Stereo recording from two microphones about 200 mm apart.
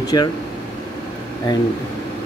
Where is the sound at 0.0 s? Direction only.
20° left (ahead or behind).